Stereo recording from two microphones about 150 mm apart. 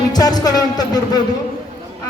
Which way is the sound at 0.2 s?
25° left (ahead or behind).